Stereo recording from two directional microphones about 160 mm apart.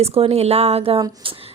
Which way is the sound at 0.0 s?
40° right (ahead or behind).